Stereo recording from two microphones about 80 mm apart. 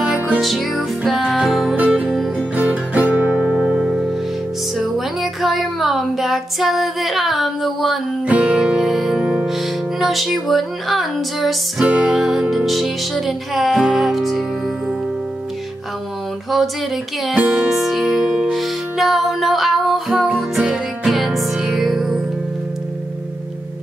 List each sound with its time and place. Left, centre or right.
0.4 s music: centre
1.8 s music: centre
8.3 s music: centre
9.1 s music: centre
9.9 s music: centre
17.4 s music: centre
17.7 s music: centre